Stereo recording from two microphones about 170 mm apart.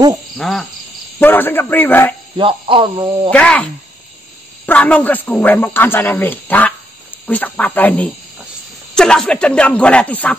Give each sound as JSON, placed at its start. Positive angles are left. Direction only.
{"t": 0.4, "sound": "cricket", "side_deg": 0}
{"t": 1.2, "sound": "speech", "side_deg": 10}
{"t": 2.3, "sound": "speech", "side_deg": -30}
{"t": 3.3, "sound": "speech", "side_deg": 5}